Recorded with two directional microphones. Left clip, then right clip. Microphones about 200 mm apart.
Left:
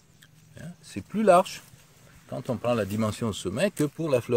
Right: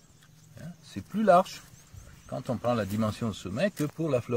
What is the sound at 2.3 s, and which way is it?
Speech, 30° left (ahead or behind).